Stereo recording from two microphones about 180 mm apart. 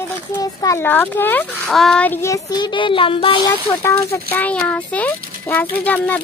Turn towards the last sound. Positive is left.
turn(degrees=10)  # may be behind; listen again after turning